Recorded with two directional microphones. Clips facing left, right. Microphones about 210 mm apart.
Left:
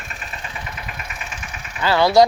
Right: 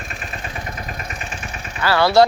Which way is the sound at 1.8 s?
15° left (ahead or behind).